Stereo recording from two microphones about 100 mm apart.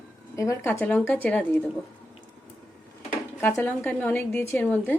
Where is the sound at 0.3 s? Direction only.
30° left (ahead or behind); by 1.7 s 15° left (ahead or behind).